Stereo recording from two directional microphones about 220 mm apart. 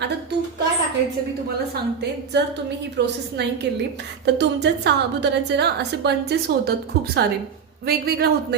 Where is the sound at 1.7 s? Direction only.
50° right (ahead or behind).